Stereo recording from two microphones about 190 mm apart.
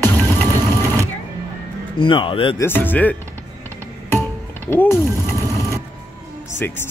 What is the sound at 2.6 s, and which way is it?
Speech, 10° left (ahead or behind).